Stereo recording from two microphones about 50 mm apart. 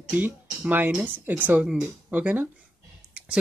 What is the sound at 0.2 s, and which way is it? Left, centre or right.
Speech, right.